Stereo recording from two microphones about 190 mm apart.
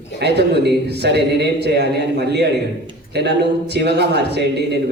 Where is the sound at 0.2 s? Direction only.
60° right (ahead or behind).